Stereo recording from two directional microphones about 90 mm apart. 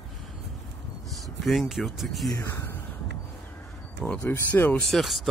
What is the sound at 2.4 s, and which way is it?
Speech, 30° left (ahead or behind).